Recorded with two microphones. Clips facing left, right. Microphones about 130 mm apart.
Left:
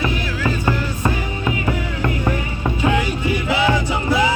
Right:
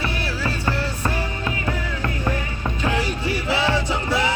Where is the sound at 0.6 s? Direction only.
15° left (ahead or behind).